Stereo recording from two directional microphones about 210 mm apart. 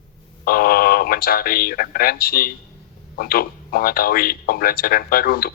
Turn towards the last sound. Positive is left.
turn(degrees=45)  # may be behind; listen again after turning